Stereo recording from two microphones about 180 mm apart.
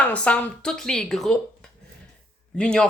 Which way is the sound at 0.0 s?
5° left (ahead or behind).